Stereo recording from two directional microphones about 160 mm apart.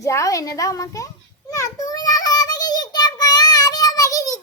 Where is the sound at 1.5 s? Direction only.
20° left (ahead or behind).